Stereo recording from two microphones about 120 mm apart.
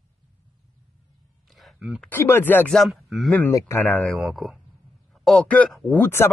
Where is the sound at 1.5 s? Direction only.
Centre (ahead or behind).